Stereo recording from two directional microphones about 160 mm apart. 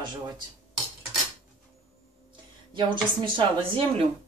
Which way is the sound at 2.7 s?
30° right (ahead or behind).